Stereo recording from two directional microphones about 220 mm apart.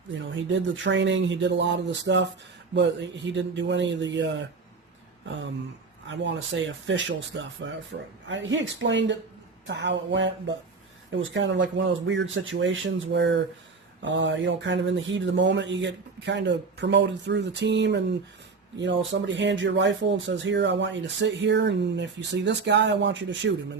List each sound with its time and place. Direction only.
0.1 s speech: 55° right (ahead or behind)
6.1 s speech: 55° right (ahead or behind)